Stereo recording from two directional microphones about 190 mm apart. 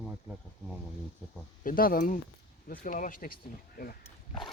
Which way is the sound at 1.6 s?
50° left (ahead or behind).